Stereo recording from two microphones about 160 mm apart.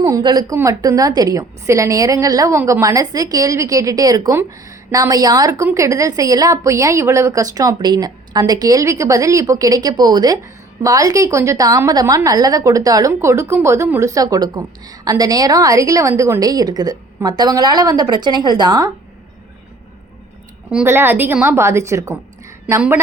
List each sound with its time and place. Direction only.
0.0 s a woman's voice: 25° right (ahead or behind)
20.7 s a woman's voice: 10° right (ahead or behind)